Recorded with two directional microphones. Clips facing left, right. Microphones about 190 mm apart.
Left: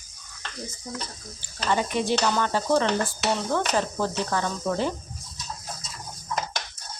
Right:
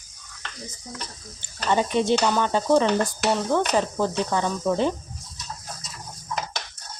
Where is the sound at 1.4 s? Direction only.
25° right (ahead or behind).